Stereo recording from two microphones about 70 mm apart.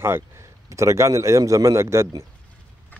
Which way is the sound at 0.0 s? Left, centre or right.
Right.